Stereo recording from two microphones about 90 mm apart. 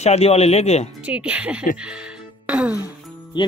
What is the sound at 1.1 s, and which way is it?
Speech, 15° right (ahead or behind).